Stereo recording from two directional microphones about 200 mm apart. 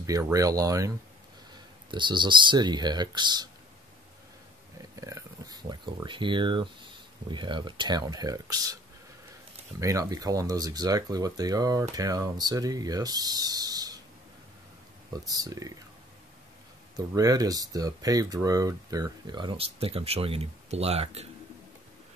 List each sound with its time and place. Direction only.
0.0 s speech: 15° right (ahead or behind)
5.0 s speech: 20° right (ahead or behind)
9.8 s speech: 15° right (ahead or behind)
15.2 s speech: 15° right (ahead or behind)
16.9 s speech: 15° right (ahead or behind)